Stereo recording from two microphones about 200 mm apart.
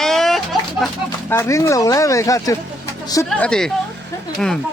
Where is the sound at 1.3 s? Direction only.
15° left (ahead or behind).